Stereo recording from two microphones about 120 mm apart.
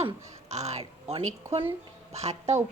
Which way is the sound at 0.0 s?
65° right (ahead or behind).